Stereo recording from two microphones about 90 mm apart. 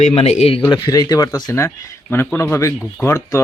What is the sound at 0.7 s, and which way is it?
Speech, 45° left (ahead or behind).